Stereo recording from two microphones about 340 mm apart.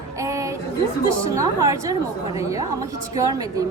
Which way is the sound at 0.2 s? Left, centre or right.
Centre.